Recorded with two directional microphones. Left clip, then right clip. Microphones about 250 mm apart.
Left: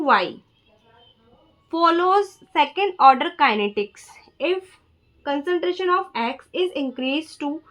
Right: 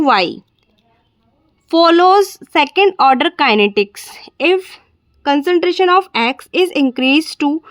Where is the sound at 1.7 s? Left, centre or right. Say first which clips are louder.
Right 9 dB; right.